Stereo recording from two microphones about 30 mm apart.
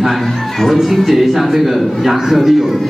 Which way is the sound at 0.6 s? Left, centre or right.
Centre.